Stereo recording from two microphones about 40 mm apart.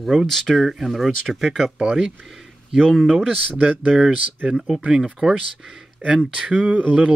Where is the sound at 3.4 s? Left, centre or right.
Right.